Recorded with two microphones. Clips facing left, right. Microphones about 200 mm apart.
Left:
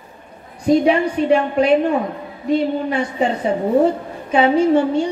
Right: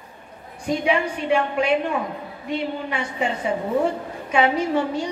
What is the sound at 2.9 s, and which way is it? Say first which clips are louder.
A woman's voice: left 6 dB; 40° left (ahead or behind).